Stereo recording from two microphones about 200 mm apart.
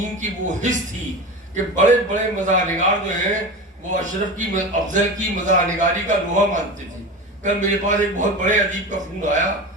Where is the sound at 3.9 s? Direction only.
40° right (ahead or behind).